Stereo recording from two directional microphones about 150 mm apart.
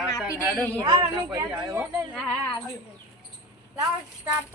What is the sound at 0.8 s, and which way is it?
Speech, 25° right (ahead or behind).